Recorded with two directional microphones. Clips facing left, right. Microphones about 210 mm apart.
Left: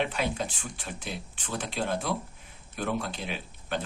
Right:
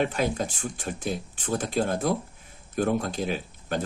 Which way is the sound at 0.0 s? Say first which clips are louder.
Right 4 dB; 45° right (ahead or behind).